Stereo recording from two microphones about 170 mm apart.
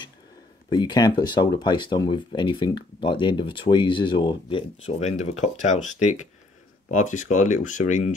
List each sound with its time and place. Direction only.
0.7 s speech: 25° left (ahead or behind); by 8.1 s 45° left (ahead or behind)